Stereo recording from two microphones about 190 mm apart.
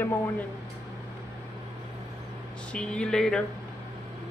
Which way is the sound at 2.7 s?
5° left (ahead or behind).